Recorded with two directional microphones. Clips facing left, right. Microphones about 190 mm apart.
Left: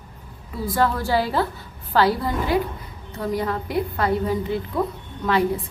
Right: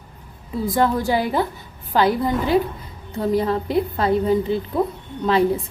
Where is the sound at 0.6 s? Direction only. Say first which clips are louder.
Right 2 dB; 20° right (ahead or behind).